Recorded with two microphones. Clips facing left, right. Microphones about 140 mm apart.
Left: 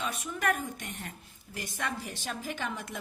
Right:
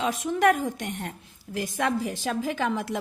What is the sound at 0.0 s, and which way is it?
Speech, 90° right.